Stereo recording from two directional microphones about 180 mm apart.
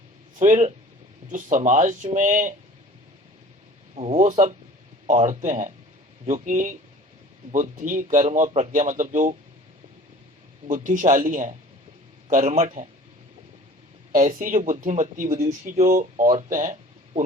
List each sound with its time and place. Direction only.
0.3 s speech: 45° right (ahead or behind)
3.9 s speech: 40° right (ahead or behind)
10.7 s speech: 45° right (ahead or behind)
14.1 s speech: 45° right (ahead or behind)